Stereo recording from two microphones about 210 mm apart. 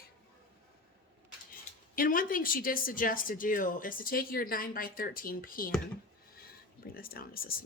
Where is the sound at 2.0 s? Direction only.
40° left (ahead or behind).